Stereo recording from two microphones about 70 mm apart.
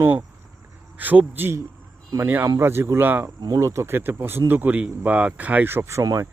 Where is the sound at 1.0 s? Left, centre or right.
Right.